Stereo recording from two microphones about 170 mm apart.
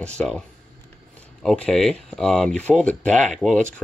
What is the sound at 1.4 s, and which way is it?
Speech, centre (ahead or behind).